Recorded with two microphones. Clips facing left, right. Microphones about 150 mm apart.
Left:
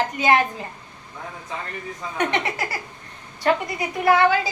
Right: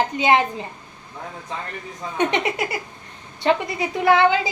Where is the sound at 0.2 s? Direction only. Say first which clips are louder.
Right 1 dB; 20° right (ahead or behind).